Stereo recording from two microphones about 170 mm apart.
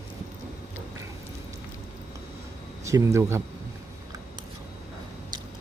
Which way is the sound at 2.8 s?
20° right (ahead or behind).